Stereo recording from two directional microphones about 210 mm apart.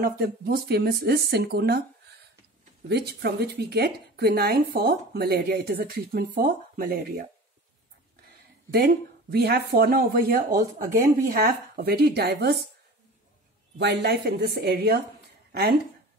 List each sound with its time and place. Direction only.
0.0 s speech: 45° right (ahead or behind)
2.9 s speech: 50° right (ahead or behind)
8.7 s speech: 50° right (ahead or behind)
13.7 s speech: 50° right (ahead or behind)